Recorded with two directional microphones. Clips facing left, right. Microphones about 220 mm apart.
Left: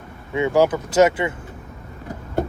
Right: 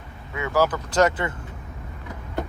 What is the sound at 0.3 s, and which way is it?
Speech, 20° left (ahead or behind).